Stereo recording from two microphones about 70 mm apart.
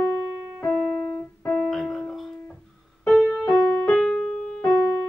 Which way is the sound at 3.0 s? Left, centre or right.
Centre.